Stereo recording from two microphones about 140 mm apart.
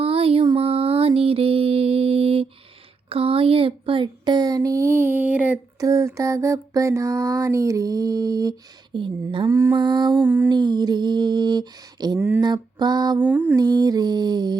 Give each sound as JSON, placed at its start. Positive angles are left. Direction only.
{"t": 0.0, "sound": "a sound", "side_deg": -40}
{"t": 0.5, "sound": "music", "side_deg": -45}
{"t": 3.1, "sound": "mantra", "side_deg": -40}
{"t": 5.8, "sound": "mantra", "side_deg": -20}
{"t": 9.5, "sound": "mantra", "side_deg": -20}
{"t": 9.7, "sound": "a sound", "side_deg": -30}
{"t": 10.2, "sound": "music", "side_deg": -15}
{"t": 10.5, "sound": "a sound", "side_deg": -30}
{"t": 12.4, "sound": "mantra", "side_deg": -30}
{"t": 13.2, "sound": "music", "side_deg": -10}
{"t": 13.6, "sound": "mantra", "side_deg": -30}